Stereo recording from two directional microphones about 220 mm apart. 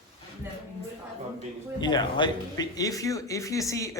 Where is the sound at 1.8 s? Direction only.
20° left (ahead or behind).